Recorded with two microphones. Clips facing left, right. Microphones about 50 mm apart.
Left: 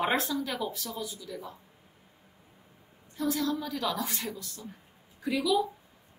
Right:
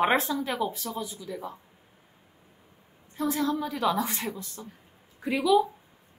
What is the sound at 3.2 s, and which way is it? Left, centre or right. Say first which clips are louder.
A woman's voice: right 3 dB; right.